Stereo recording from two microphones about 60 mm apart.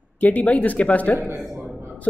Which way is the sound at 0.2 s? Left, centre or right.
Left.